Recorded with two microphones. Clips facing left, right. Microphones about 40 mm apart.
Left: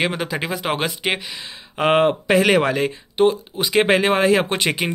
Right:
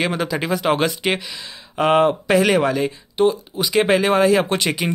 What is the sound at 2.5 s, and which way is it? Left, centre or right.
Speech, left.